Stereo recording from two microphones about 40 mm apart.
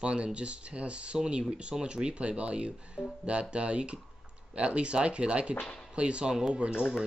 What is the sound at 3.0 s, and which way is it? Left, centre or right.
Speech, centre.